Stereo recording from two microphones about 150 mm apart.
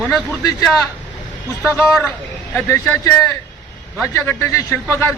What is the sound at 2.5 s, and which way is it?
Speech, 20° left (ahead or behind).